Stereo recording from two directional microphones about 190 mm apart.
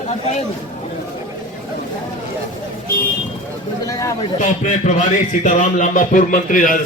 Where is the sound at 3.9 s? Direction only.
15° left (ahead or behind).